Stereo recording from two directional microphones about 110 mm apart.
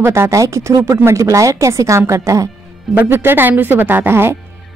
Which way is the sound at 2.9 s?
15° right (ahead or behind).